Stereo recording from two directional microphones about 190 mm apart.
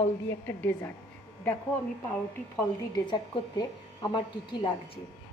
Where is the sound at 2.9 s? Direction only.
20° left (ahead or behind).